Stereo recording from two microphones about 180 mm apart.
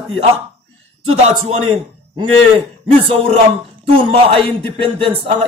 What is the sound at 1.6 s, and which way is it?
A man's voice, 35° right (ahead or behind).